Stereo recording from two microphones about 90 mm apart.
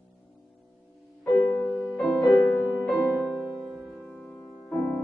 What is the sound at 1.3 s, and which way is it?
Music, 15° left (ahead or behind).